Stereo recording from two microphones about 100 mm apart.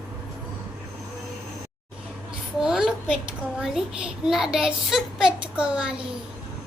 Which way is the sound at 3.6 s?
5° right (ahead or behind).